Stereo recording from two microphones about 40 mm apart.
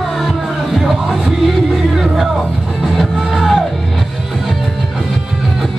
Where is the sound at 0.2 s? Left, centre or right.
Centre.